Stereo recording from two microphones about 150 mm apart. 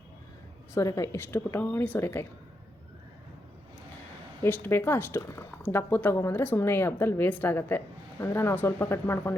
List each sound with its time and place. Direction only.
0.7 s speech: 20° left (ahead or behind)
4.4 s speech: 15° left (ahead or behind)